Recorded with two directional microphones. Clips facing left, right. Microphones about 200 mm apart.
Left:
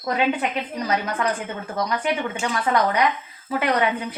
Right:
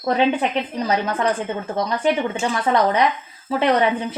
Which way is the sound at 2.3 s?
30° right (ahead or behind).